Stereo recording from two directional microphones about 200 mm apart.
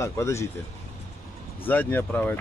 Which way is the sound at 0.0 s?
15° left (ahead or behind).